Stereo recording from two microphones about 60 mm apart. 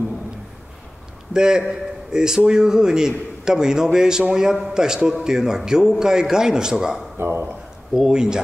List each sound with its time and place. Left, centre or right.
1.3 s a man's voice: centre
7.2 s speech: right
7.9 s a man's voice: centre